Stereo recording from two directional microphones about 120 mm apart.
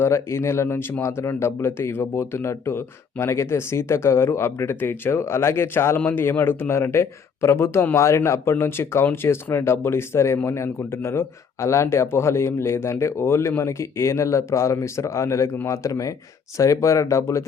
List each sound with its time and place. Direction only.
0.0 s speech: 20° left (ahead or behind)